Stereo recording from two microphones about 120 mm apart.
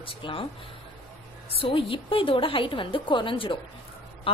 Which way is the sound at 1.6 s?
50° left (ahead or behind).